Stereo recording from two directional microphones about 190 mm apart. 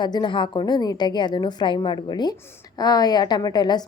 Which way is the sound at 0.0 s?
25° left (ahead or behind).